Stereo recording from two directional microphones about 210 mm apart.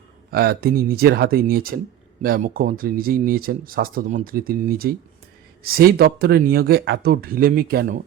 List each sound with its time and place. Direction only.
0.3 s speech: 45° right (ahead or behind)